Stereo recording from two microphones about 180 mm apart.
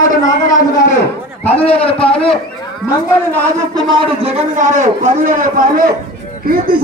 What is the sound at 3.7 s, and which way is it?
A man's voice, 25° right (ahead or behind).